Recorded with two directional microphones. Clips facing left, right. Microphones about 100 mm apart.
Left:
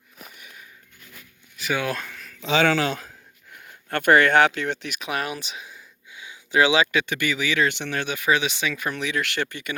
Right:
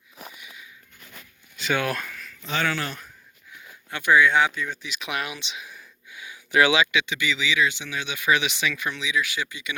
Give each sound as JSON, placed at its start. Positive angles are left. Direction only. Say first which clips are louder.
{"t": 0.3, "sound": "a sound", "louder": "right 1 dB", "side_deg": 45}
{"t": 1.7, "sound": "speech", "louder": "even", "side_deg": 20}
{"t": 2.4, "sound": "speech", "louder": "left 7 dB", "side_deg": 90}
{"t": 3.5, "sound": "speech", "louder": "left 7 dB", "side_deg": 55}
{"t": 4.9, "sound": "speech", "louder": "left 3 dB", "side_deg": 40}
{"t": 5.6, "sound": "gasp", "louder": "even", "side_deg": 20}
{"t": 6.7, "sound": "speech", "louder": "left 2 dB", "side_deg": 50}
{"t": 8.2, "sound": "speech", "louder": "even", "side_deg": 35}
{"t": 9.0, "sound": "speech", "louder": "left 1 dB", "side_deg": 55}